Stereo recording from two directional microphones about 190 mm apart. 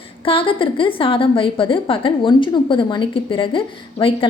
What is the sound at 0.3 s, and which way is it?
Speech, 30° left (ahead or behind).